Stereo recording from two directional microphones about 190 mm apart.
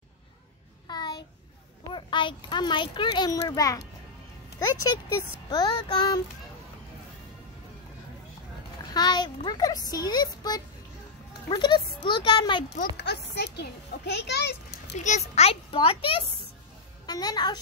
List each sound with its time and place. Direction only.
0.8 s a sound: 20° left (ahead or behind)
1.9 s a child's voice: 25° left (ahead or behind)
5.5 s a child's voice: 25° left (ahead or behind)
8.9 s a child's voice: 20° left (ahead or behind)
12.9 s a child's voice: 60° left (ahead or behind)
15.0 s a child's voice: 40° left (ahead or behind); by 17.6 s 20° left (ahead or behind)